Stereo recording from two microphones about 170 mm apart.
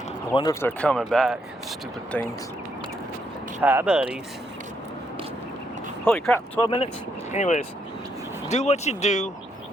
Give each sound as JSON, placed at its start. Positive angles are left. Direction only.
{"t": 0.6, "sound": "speech", "side_deg": 5}
{"t": 3.6, "sound": "speech", "side_deg": -10}
{"t": 6.1, "sound": "speech", "side_deg": 5}
{"t": 6.6, "sound": "speech", "side_deg": 30}
{"t": 7.3, "sound": "speech", "side_deg": 45}